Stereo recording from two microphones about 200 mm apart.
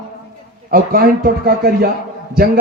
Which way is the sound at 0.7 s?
45° right (ahead or behind).